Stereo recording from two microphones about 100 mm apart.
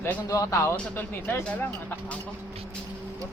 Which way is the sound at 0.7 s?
20° left (ahead or behind).